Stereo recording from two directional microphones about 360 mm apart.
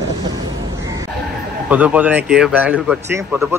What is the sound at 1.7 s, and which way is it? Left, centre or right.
Speech, centre.